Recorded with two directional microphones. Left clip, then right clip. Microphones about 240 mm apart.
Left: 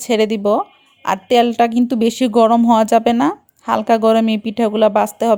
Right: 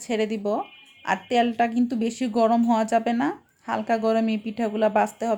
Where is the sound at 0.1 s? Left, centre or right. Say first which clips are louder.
Left 10 dB; left.